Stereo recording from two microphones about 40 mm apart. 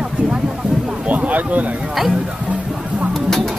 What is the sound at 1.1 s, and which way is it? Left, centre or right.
Speech, right.